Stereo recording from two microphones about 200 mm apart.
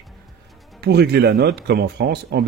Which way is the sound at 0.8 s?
55° right (ahead or behind).